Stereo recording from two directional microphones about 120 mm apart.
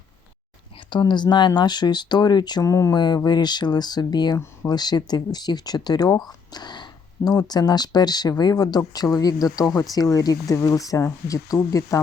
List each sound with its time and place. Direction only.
0.9 s speech: 40° left (ahead or behind)